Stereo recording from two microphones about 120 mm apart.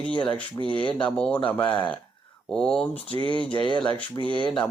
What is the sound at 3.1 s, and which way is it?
Speech, 45° left (ahead or behind).